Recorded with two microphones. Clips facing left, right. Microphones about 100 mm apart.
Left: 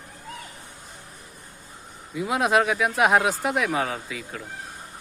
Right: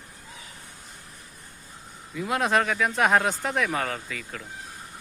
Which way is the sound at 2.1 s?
10° left (ahead or behind).